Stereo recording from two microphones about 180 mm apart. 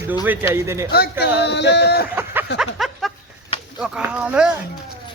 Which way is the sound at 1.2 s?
70° left (ahead or behind).